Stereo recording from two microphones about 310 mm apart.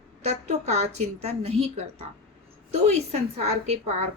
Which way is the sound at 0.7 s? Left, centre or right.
Right.